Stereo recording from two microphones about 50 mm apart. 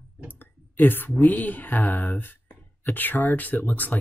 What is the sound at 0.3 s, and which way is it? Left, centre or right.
Speech, left.